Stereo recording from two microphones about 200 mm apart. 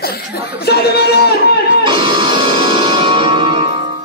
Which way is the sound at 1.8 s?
25° right (ahead or behind).